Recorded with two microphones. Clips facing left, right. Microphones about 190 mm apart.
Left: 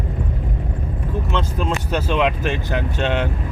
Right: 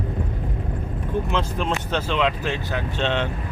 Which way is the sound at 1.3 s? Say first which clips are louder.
Left 1 dB; 5° left (ahead or behind).